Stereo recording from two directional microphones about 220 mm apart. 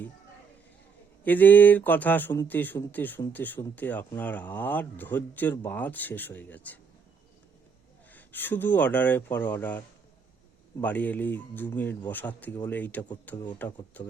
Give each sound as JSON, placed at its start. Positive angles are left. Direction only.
{"t": 1.2, "sound": "speech", "side_deg": 10}
{"t": 8.1, "sound": "speech", "side_deg": 10}